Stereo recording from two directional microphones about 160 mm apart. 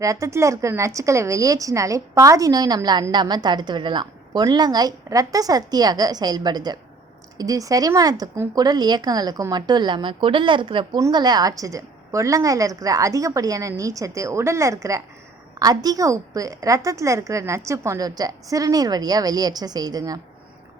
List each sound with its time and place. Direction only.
0.0 s a woman's voice: 20° right (ahead or behind)